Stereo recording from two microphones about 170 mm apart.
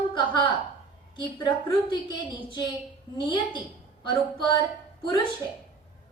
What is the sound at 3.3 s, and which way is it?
A woman's voice, 30° left (ahead or behind).